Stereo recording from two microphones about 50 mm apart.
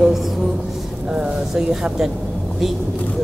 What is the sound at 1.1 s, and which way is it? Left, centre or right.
Speech, centre.